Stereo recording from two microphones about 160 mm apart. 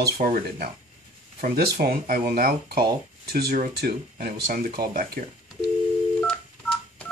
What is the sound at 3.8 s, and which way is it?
Speech, 80° right.